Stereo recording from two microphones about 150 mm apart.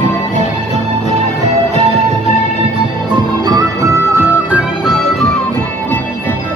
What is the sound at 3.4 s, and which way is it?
Music, 25° right (ahead or behind).